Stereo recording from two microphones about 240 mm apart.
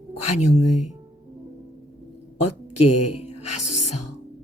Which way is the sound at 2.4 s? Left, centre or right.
Left.